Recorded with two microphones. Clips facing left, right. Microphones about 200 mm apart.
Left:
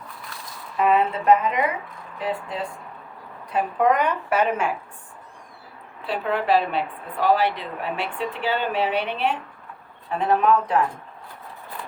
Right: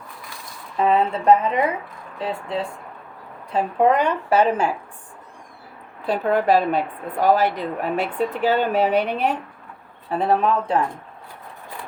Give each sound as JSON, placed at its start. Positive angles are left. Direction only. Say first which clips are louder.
{"t": 0.8, "sound": "a woman's voice", "louder": "right 1 dB", "side_deg": -30}
{"t": 6.1, "sound": "a woman's voice", "louder": "right 4 dB", "side_deg": -45}